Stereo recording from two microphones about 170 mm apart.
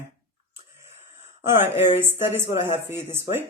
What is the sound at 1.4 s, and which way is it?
Speech, 15° right (ahead or behind).